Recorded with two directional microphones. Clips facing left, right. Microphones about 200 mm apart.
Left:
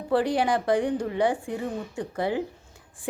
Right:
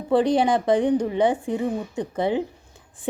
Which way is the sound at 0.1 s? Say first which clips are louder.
Right 4 dB; 20° right (ahead or behind).